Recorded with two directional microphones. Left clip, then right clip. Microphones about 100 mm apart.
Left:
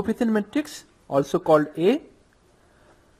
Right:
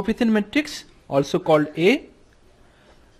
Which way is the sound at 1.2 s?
30° left (ahead or behind).